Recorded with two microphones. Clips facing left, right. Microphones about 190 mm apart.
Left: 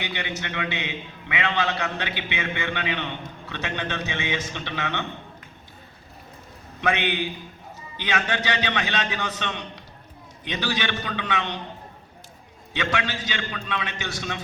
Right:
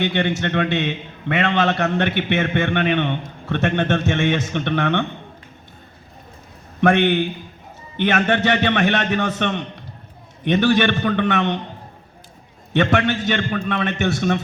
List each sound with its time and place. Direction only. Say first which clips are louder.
0.0 s a man's voice: right 11 dB; 65° right (ahead or behind)
6.8 s a man's voice: right 9 dB; 60° right (ahead or behind)
12.7 s a man's voice: right 9 dB; 55° right (ahead or behind)